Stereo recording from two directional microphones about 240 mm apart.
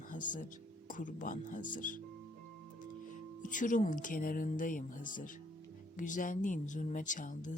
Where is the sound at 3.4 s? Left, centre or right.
Left.